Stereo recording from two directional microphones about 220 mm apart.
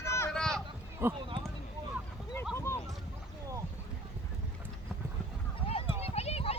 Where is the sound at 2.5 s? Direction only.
15° left (ahead or behind).